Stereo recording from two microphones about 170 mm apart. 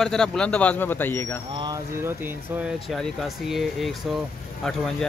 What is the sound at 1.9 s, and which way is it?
Speech, 15° right (ahead or behind).